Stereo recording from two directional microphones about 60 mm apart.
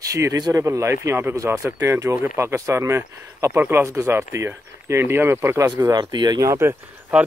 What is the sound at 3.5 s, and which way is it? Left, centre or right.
Speech, right.